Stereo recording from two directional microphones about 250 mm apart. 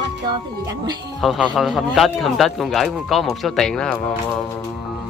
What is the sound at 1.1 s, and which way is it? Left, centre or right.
Speech, centre.